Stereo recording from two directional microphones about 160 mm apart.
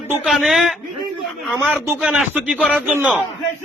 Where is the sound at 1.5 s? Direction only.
15° right (ahead or behind).